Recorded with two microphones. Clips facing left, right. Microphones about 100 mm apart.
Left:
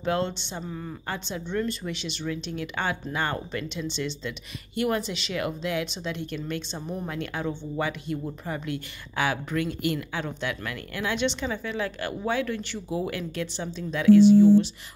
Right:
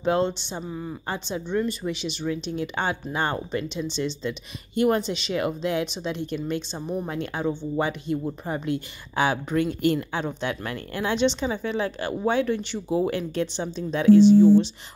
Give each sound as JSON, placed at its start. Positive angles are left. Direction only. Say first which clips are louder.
{"t": 0.0, "sound": "a woman's voice", "louder": "right 4 dB", "side_deg": -20}